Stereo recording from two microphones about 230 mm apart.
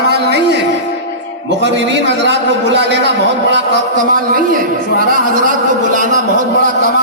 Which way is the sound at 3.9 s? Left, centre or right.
Right.